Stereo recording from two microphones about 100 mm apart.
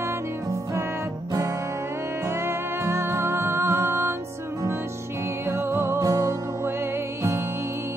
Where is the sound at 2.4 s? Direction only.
25° right (ahead or behind).